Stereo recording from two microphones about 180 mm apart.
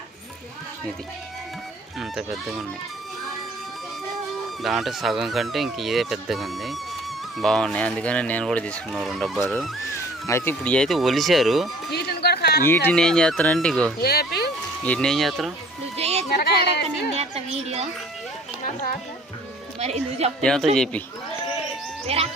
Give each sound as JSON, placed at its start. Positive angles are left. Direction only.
{"t": 2.0, "sound": "speech", "side_deg": 0}
{"t": 4.6, "sound": "speech", "side_deg": 0}
{"t": 9.9, "sound": "speech", "side_deg": 15}
{"t": 11.9, "sound": "a sound", "side_deg": 60}
{"t": 12.6, "sound": "speech", "side_deg": 10}
{"t": 14.0, "sound": "speech", "side_deg": 60}
{"t": 14.8, "sound": "speech", "side_deg": 5}
{"t": 16.0, "sound": "music", "side_deg": -35}
{"t": 16.4, "sound": "a sound", "side_deg": 65}
{"t": 17.2, "sound": "a sound", "side_deg": -35}
{"t": 18.6, "sound": "children playing", "side_deg": 50}
{"t": 19.8, "sound": "a woman's voice", "side_deg": -35}
{"t": 20.4, "sound": "speech", "side_deg": 5}
{"t": 22.0, "sound": "music", "side_deg": -35}